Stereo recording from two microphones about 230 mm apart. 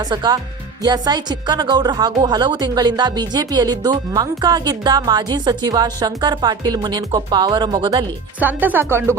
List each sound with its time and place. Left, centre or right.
0.1 s a woman's voice: centre